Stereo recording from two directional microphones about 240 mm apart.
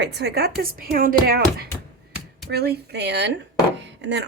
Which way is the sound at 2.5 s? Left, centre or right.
Right.